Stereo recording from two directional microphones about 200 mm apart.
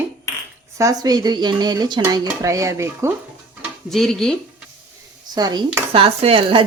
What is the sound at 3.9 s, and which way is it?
Speech, centre (ahead or behind).